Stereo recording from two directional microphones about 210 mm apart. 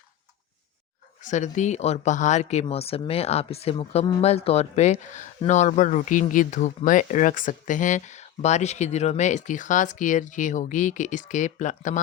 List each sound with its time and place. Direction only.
1.2 s speech: 35° left (ahead or behind)